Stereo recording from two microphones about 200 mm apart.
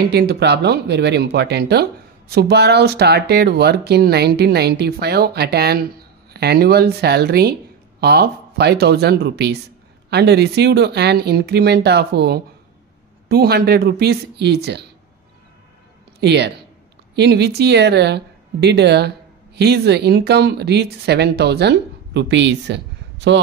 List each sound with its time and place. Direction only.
0.1 s speech: 55° right (ahead or behind)
16.2 s speech: 55° right (ahead or behind)